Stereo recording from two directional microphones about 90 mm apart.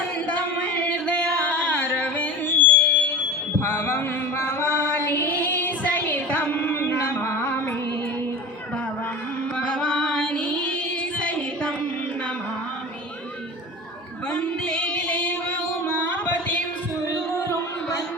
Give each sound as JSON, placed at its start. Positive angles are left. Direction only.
{"t": 0.3, "sound": "singing", "side_deg": 15}
{"t": 3.6, "sound": "mantra", "side_deg": 20}
{"t": 9.6, "sound": "music", "side_deg": 10}
{"t": 14.3, "sound": "female singing", "side_deg": 10}
{"t": 17.1, "sound": "music", "side_deg": 30}